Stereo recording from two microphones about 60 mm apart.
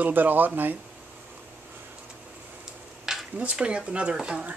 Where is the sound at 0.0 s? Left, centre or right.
Right.